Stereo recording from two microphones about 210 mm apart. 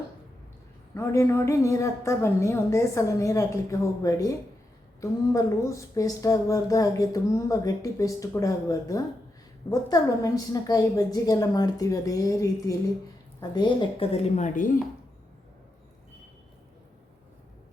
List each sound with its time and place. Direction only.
0.9 s a woman's voice: 15° left (ahead or behind); by 14.8 s 40° left (ahead or behind)